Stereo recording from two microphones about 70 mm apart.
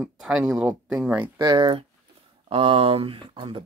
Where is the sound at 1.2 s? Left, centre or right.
Right.